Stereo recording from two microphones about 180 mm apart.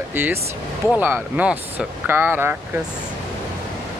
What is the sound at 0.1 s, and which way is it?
Speech, 10° right (ahead or behind).